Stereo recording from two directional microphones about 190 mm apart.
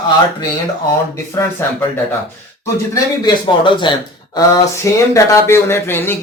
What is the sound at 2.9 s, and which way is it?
A man's voice, 20° left (ahead or behind).